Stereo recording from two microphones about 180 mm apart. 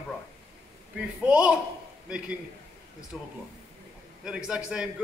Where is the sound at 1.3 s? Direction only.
5° right (ahead or behind).